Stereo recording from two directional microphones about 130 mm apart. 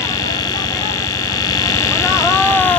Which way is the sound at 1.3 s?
30° left (ahead or behind).